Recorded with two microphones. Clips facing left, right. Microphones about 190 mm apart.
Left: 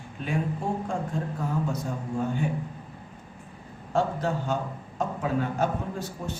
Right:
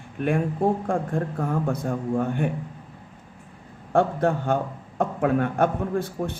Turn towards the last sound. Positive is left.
turn(degrees=-55)  # may be behind; listen again after turning